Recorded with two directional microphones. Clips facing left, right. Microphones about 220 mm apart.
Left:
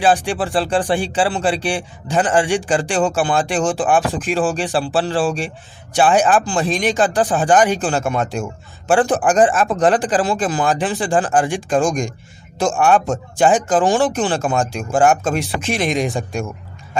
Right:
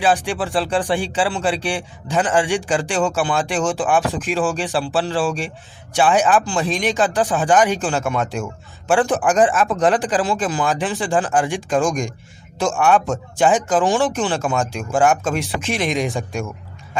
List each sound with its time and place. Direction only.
0.0 s speech: 35° left (ahead or behind)